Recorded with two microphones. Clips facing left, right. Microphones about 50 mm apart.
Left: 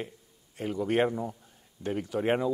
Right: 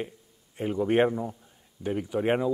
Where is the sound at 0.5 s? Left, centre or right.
Centre.